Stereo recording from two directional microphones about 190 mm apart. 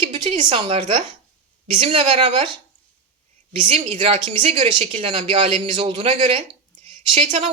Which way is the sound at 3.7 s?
30° right (ahead or behind).